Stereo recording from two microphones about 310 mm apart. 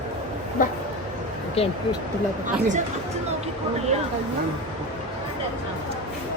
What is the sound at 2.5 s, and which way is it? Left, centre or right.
Speech, right.